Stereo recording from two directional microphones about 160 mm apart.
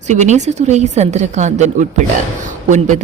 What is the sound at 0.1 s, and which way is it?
A woman's voice, 45° right (ahead or behind).